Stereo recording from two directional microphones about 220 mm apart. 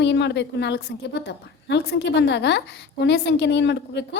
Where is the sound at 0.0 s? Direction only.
50° left (ahead or behind).